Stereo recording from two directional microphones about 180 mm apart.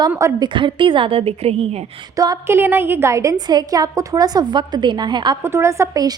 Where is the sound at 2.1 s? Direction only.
20° right (ahead or behind).